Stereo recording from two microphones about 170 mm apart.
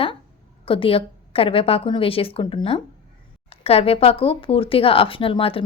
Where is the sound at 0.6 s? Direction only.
30° left (ahead or behind).